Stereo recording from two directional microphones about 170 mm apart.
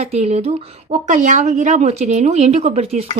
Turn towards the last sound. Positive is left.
turn(degrees=-40)  # may be behind; listen again after turning